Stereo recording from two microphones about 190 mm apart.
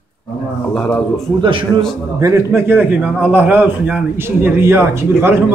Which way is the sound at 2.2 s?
15° right (ahead or behind).